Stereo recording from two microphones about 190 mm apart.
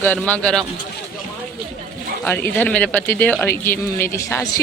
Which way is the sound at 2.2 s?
10° left (ahead or behind).